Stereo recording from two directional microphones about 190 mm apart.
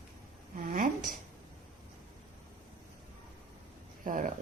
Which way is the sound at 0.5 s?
45° right (ahead or behind).